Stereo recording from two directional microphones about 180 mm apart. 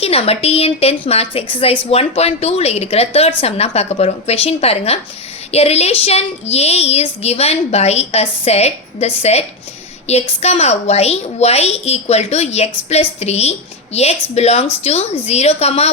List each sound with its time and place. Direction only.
0.0 s speech: 35° left (ahead or behind)